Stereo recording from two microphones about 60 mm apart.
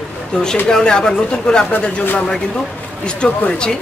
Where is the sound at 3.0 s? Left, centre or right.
Centre.